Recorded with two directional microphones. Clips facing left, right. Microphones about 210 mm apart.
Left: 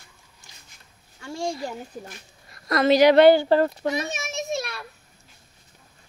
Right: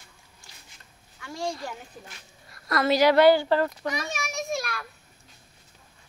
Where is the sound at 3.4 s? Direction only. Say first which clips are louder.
Left 4 dB; 30° left (ahead or behind).